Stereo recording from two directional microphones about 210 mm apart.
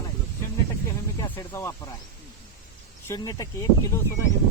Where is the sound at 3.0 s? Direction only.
15° left (ahead or behind).